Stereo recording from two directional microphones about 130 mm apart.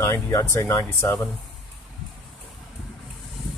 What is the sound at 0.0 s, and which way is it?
Speech, 25° left (ahead or behind).